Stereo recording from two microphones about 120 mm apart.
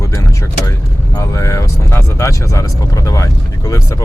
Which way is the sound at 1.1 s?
25° left (ahead or behind).